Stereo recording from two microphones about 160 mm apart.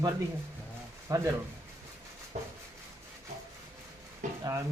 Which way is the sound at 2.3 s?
45° right (ahead or behind).